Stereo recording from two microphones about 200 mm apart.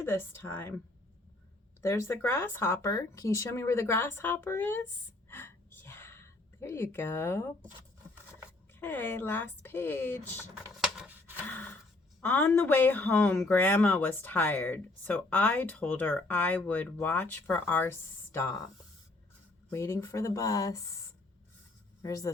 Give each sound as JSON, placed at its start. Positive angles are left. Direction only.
{"t": 0.0, "sound": "speech", "side_deg": 10}
{"t": 1.8, "sound": "speech", "side_deg": 15}
{"t": 5.3, "sound": "a sound", "side_deg": 10}
{"t": 8.8, "sound": "speech", "side_deg": 10}
{"t": 10.9, "sound": "a sound", "side_deg": -5}
{"t": 11.4, "sound": "pant", "side_deg": 10}
{"t": 12.2, "sound": "speech", "side_deg": 10}
{"t": 19.7, "sound": "speech", "side_deg": 15}